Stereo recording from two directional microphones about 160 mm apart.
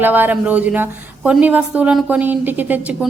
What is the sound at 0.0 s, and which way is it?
A woman's voice, 10° right (ahead or behind).